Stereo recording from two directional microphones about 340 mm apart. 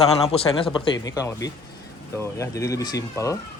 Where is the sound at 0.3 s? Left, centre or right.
Centre.